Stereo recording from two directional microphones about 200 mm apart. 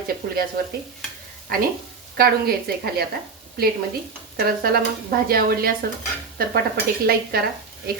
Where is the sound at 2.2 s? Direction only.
50° right (ahead or behind).